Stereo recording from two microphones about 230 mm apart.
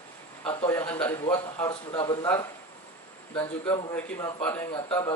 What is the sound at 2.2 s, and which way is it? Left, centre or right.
Speech, centre.